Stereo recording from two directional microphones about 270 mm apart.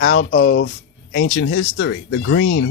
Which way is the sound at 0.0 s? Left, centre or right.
Left.